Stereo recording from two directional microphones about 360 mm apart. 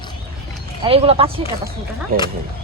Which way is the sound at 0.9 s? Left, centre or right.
Centre.